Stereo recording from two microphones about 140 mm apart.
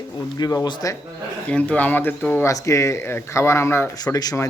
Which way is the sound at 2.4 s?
20° left (ahead or behind).